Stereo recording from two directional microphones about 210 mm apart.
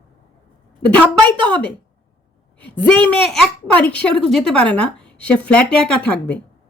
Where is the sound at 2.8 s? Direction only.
5° left (ahead or behind).